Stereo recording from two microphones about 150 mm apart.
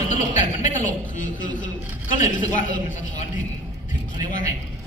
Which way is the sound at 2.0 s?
60° left (ahead or behind).